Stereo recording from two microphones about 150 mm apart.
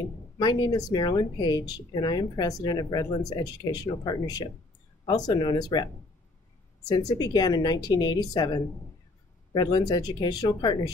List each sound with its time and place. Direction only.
0.4 s speech: 30° left (ahead or behind)
6.9 s speech: 25° left (ahead or behind)